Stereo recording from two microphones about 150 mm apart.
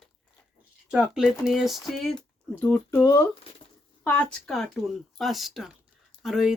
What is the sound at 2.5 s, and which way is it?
Speech, 15° left (ahead or behind).